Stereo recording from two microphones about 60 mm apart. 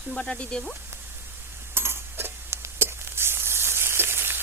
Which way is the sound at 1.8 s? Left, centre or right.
Right.